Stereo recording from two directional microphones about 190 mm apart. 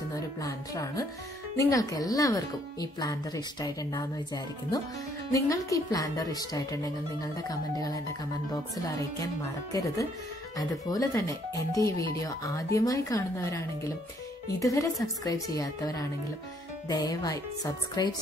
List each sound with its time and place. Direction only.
0.1 s speech: 15° left (ahead or behind)